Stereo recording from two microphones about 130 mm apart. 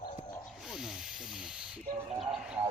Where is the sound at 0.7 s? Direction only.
Centre (ahead or behind).